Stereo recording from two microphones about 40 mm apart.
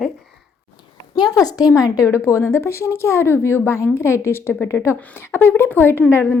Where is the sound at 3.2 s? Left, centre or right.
Left.